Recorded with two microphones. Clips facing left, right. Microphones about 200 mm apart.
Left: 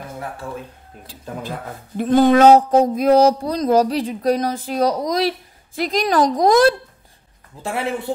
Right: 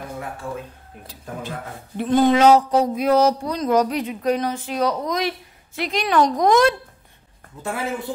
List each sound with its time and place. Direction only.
1.0 s speech: 35° left (ahead or behind)
2.7 s a sound: 45° left (ahead or behind)
3.1 s speech: 35° left (ahead or behind)
7.6 s a man's voice: 70° left (ahead or behind)